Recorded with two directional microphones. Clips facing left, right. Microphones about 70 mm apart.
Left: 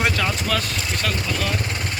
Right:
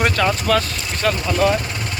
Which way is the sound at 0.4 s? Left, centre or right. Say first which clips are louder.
Right 6 dB; centre.